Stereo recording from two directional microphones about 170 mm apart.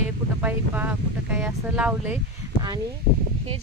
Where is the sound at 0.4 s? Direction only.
10° right (ahead or behind).